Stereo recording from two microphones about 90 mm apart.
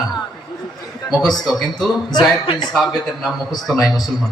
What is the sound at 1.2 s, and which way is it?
Speech, 5° left (ahead or behind).